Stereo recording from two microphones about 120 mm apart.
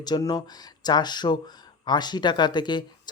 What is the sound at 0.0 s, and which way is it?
Speech, 35° left (ahead or behind).